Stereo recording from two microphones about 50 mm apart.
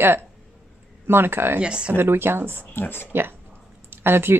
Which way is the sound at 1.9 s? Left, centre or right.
Right.